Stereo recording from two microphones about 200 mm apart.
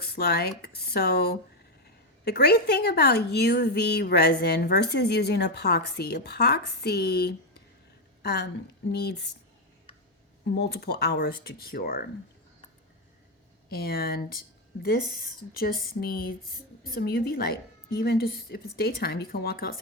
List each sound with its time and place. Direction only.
0.0 s a woman's voice: 55° left (ahead or behind)
10.5 s a woman's voice: 60° left (ahead or behind)
13.7 s a woman's voice: 50° left (ahead or behind)
15.5 s a woman's voice: 50° left (ahead or behind)